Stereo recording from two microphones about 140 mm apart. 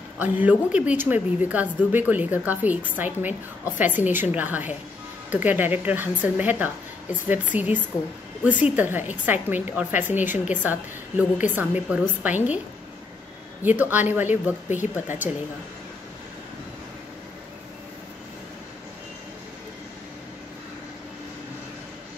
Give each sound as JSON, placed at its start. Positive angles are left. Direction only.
{"t": 0.2, "sound": "speech", "side_deg": -10}
{"t": 13.7, "sound": "speech", "side_deg": -15}
{"t": 14.7, "sound": "speech", "side_deg": 60}